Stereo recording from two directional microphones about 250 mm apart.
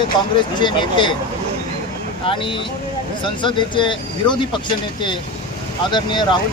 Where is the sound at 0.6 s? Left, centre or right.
Centre.